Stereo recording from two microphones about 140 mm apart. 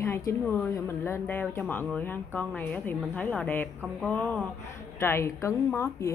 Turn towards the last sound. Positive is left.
turn(degrees=20)  # may be behind; listen again after turning